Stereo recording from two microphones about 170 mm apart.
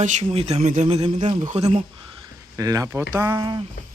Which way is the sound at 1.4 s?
45° right (ahead or behind).